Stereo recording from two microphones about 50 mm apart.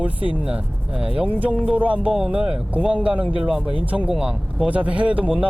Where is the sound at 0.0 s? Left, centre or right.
Right.